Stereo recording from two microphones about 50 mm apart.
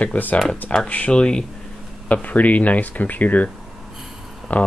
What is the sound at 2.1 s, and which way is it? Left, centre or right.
Speech, left.